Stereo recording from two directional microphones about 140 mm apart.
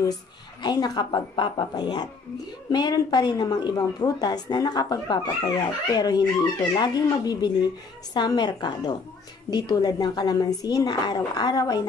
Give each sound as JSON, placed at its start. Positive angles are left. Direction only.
{"t": 0.6, "sound": "a woman's voice", "side_deg": 30}